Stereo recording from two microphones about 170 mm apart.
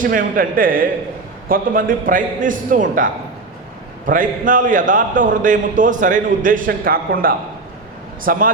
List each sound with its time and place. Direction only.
0.0 s a man's voice: 55° right (ahead or behind)